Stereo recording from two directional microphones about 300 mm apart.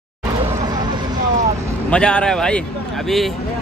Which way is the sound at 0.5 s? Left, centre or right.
Centre.